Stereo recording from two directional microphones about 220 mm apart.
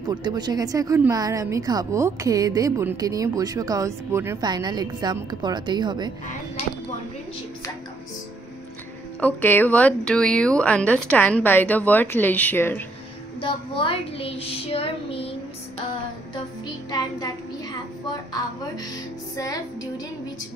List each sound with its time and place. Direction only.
0.0 s speech: 20° right (ahead or behind)
9.2 s speech: 10° left (ahead or behind)
13.4 s speech: 25° left (ahead or behind)
19.3 s speech: 15° left (ahead or behind)